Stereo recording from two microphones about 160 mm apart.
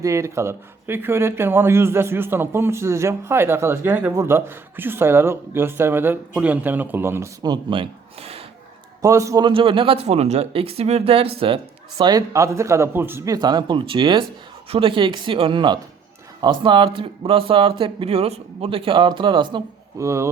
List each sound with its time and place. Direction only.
0.0 s speech: 20° right (ahead or behind); by 8.4 s 40° right (ahead or behind)
9.0 s a man's voice: 20° right (ahead or behind)
9.5 s speech: 35° right (ahead or behind)
20.0 s speech: 20° right (ahead or behind)